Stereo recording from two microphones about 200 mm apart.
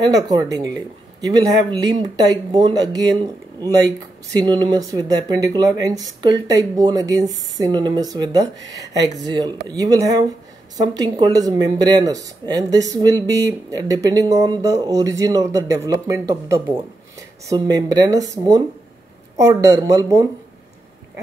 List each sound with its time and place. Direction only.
0.0 s speech: 20° right (ahead or behind)